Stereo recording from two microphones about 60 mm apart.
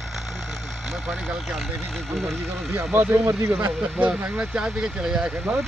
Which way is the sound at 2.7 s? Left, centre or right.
Right.